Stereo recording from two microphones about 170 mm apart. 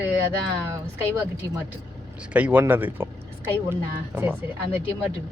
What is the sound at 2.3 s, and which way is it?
Speech, 10° right (ahead or behind).